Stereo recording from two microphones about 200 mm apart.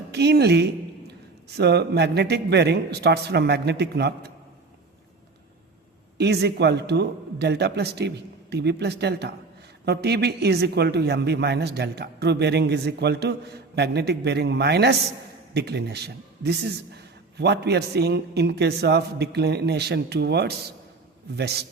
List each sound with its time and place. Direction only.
0.1 s a sound: 55° right (ahead or behind)
1.5 s speech: 55° right (ahead or behind)
6.1 s speech: 55° right (ahead or behind)